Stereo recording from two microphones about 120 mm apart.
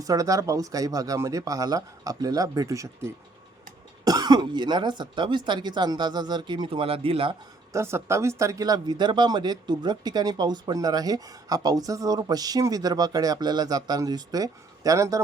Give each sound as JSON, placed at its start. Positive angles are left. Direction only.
{"t": 0.0, "sound": "speech", "side_deg": -30}
{"t": 7.7, "sound": "speech", "side_deg": -20}